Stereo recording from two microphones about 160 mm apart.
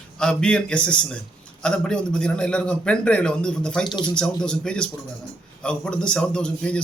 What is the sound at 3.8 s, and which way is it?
Speech, 30° left (ahead or behind).